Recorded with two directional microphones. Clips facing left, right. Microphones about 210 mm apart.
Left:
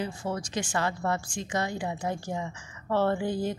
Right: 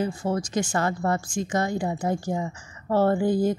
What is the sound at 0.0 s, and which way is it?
A woman's voice, 45° right (ahead or behind).